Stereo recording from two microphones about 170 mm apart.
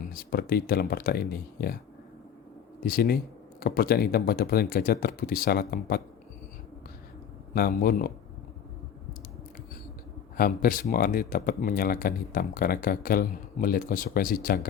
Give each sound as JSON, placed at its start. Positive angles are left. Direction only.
{"t": 0.1, "sound": "speech", "side_deg": 60}
{"t": 2.8, "sound": "speech", "side_deg": 60}
{"t": 7.5, "sound": "speech", "side_deg": 65}
{"t": 10.3, "sound": "speech", "side_deg": 60}